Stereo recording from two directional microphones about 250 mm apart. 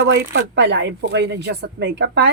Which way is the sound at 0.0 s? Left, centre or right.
Right.